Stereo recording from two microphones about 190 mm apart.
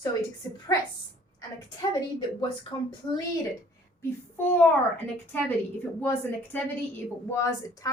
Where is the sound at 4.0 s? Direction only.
10° left (ahead or behind).